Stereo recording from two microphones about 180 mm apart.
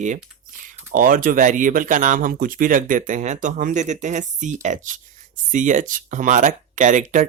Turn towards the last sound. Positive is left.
turn(degrees=-45)  # may be behind; listen again after turning